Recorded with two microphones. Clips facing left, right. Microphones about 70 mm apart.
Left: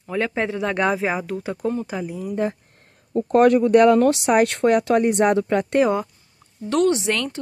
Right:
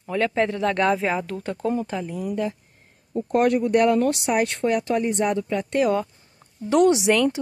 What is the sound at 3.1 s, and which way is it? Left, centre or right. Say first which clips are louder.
Speech: left 5 dB; left.